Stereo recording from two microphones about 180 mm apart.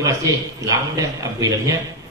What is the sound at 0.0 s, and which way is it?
A man's voice, 20° right (ahead or behind).